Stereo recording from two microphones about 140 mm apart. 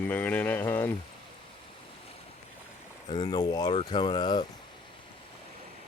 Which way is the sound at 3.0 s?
35° left (ahead or behind).